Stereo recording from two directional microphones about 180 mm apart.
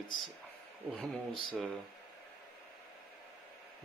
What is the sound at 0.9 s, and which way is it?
Speech, 5° left (ahead or behind).